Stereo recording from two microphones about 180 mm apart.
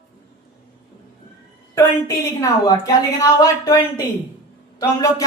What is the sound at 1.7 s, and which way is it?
A woman's voice, 15° left (ahead or behind).